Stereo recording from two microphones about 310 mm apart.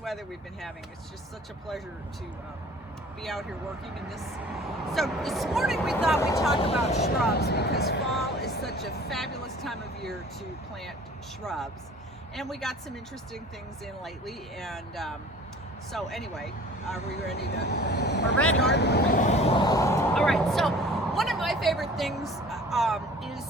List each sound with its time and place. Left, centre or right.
3.2 s speech: centre
6.7 s speech: left
7.0 s speech: left
9.0 s speech: centre
11.4 s speech: centre
14.0 s speech: centre
17.1 s speech: left; by 23.5 s centre